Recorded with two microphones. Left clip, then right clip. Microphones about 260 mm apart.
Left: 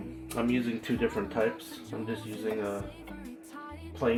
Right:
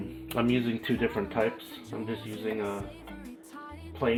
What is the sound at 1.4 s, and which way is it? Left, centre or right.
Speech, centre.